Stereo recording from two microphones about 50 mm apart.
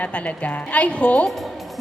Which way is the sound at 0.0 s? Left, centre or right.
Left.